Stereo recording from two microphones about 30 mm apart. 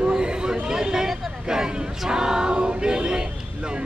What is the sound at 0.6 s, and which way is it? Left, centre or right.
Speech, centre.